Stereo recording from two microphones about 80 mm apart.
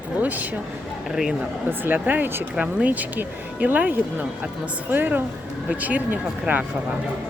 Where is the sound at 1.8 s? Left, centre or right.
Right.